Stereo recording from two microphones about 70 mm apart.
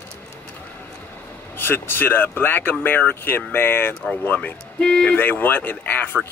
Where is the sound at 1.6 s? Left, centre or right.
Left.